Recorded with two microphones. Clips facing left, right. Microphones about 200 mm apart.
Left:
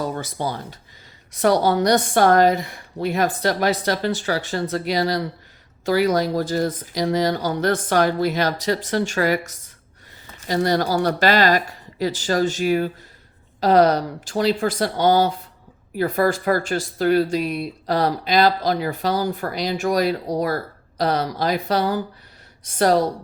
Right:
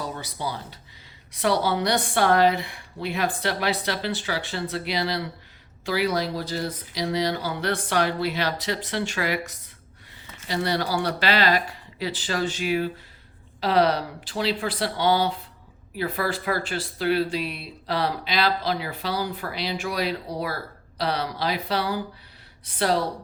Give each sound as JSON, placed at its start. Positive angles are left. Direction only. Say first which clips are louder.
{"t": 0.0, "sound": "speech", "louder": "left 6 dB", "side_deg": 45}